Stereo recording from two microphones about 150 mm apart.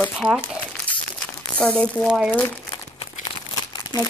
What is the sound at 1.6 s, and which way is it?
Speech, 5° left (ahead or behind).